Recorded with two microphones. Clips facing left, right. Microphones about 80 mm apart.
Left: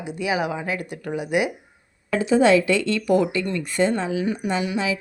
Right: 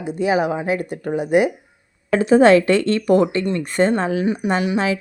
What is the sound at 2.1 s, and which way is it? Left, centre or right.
Speech, right.